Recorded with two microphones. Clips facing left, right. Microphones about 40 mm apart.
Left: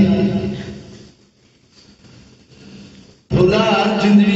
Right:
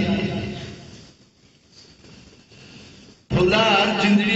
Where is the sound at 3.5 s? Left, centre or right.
Right.